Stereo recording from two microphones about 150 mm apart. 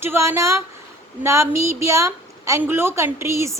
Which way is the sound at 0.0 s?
15° right (ahead or behind).